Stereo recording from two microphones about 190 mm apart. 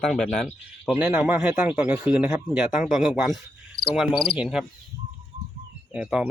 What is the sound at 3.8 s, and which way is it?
Insect, 55° left (ahead or behind).